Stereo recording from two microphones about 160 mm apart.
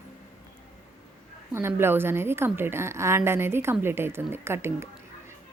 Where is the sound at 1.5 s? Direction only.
15° right (ahead or behind).